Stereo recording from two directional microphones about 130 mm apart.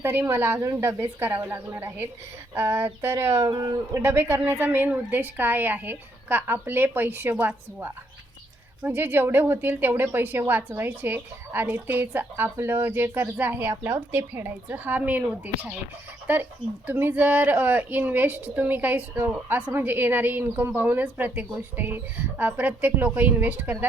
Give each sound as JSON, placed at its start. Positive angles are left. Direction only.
{"t": 0.0, "sound": "a woman's voice", "side_deg": -20}